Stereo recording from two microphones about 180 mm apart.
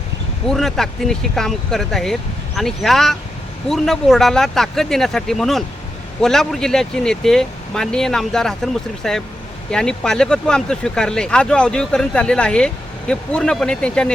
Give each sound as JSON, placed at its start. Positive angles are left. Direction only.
{"t": 0.4, "sound": "speech", "side_deg": 0}